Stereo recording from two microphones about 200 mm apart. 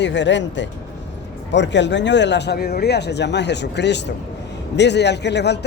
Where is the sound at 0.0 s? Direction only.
65° left (ahead or behind).